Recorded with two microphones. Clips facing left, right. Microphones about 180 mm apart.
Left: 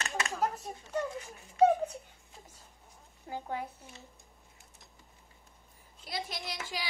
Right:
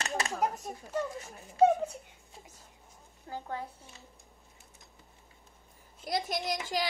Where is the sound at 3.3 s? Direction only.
15° left (ahead or behind).